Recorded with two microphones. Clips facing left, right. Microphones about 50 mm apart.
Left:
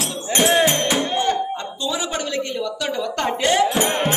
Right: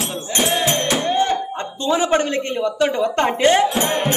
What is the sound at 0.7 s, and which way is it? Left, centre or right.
Music, centre.